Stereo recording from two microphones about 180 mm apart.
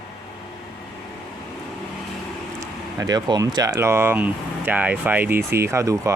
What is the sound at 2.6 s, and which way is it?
Speech, 20° right (ahead or behind).